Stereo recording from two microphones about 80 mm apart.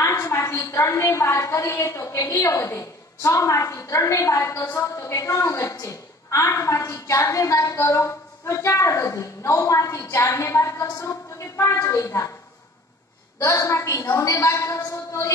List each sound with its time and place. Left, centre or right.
0.0 s a woman's voice: left
13.4 s a woman's voice: left